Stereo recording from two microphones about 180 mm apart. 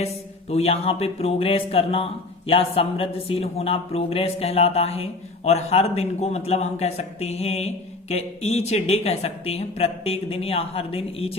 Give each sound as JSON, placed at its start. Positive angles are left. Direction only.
{"t": 0.5, "sound": "a woman's voice", "side_deg": 35}